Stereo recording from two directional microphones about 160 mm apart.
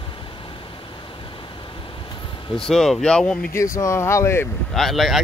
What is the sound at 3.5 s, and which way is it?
Speech, 20° left (ahead or behind).